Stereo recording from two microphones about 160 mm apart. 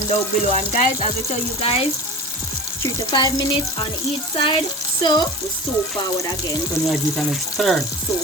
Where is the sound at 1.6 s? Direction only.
40° left (ahead or behind).